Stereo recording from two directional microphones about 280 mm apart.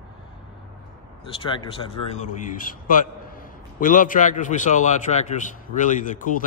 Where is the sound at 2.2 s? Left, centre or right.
Left.